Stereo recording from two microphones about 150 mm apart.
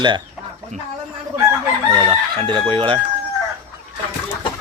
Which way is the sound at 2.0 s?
35° right (ahead or behind).